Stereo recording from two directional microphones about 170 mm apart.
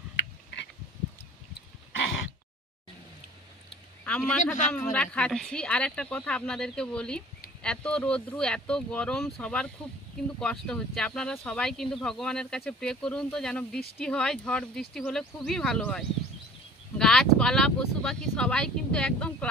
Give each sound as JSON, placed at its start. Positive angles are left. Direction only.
{"t": 0.1, "sound": "a sound", "side_deg": 90}
{"t": 4.0, "sound": "a man's voice", "side_deg": 10}
{"t": 17.0, "sound": "speech", "side_deg": 5}